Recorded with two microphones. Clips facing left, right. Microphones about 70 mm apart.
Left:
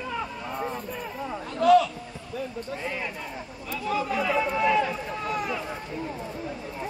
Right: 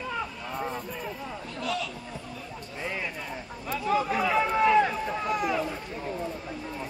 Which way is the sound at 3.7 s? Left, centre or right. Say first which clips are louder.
Right 2 dB; right.